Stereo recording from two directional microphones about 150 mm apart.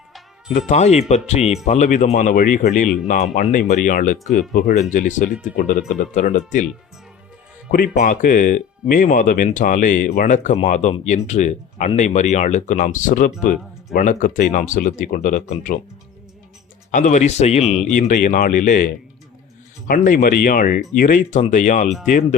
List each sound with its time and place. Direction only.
0.7 s speech: 50° left (ahead or behind)
7.9 s speech: 55° left (ahead or behind)
16.9 s speech: 55° left (ahead or behind)
17.9 s speech: 60° left (ahead or behind)
19.9 s speech: 65° left (ahead or behind)